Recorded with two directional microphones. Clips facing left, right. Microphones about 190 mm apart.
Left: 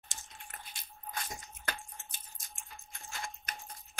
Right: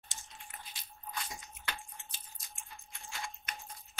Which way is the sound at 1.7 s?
45° left (ahead or behind).